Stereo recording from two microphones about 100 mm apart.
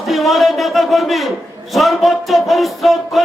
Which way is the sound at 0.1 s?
Centre (ahead or behind).